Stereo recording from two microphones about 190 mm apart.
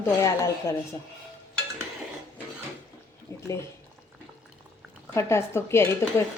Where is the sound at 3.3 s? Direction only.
15° left (ahead or behind).